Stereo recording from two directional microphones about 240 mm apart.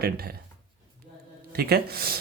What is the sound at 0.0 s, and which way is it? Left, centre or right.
Speech, right.